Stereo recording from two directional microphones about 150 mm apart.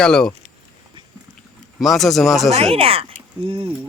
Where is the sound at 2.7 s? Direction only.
40° right (ahead or behind).